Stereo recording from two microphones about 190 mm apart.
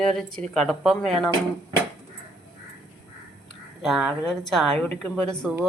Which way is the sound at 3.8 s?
Centre (ahead or behind).